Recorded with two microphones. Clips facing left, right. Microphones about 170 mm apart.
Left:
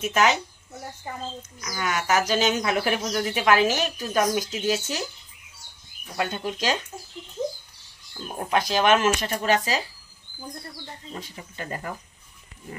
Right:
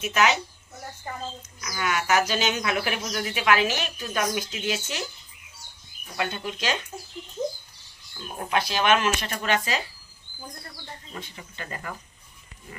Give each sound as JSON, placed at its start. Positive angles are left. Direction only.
{"t": 0.0, "sound": "a woman's voice", "side_deg": 45}
{"t": 1.6, "sound": "speech", "side_deg": 40}
{"t": 6.1, "sound": "speech", "side_deg": 40}
{"t": 8.5, "sound": "speech", "side_deg": 45}
{"t": 11.1, "sound": "speech", "side_deg": 40}